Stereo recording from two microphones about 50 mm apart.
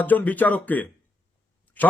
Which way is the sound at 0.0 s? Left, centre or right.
Left.